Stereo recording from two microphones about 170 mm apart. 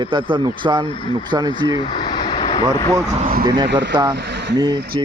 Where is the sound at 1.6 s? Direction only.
25° left (ahead or behind).